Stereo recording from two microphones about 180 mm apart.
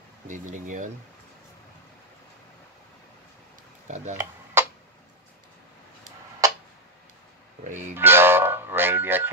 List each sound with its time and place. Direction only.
0.3 s speech: 45° right (ahead or behind)
3.8 s speech: 40° right (ahead or behind)
4.6 s tick-tock: 15° right (ahead or behind)
6.4 s tick-tock: 20° right (ahead or behind)
7.9 s music: 10° right (ahead or behind)